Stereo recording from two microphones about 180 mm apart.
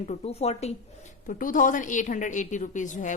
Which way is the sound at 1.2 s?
45° left (ahead or behind).